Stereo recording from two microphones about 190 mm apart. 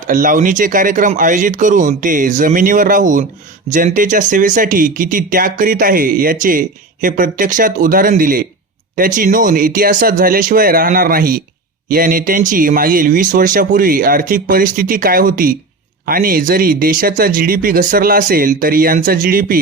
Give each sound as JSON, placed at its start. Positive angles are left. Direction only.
{"t": 0.1, "sound": "speech", "side_deg": -45}